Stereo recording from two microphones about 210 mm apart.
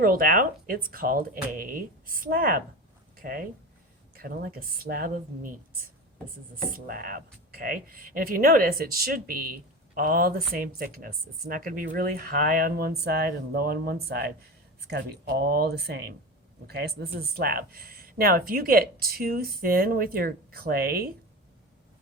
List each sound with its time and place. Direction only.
0.0 s speech: 45° right (ahead or behind)
6.7 s speech: 40° right (ahead or behind)